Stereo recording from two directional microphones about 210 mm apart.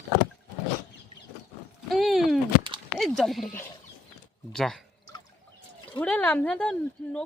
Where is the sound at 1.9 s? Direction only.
Centre (ahead or behind).